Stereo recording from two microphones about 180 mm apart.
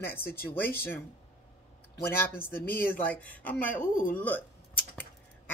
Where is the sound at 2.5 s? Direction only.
55° left (ahead or behind).